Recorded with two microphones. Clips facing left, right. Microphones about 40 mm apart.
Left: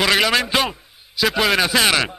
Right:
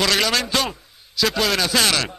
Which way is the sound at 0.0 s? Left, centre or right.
Centre.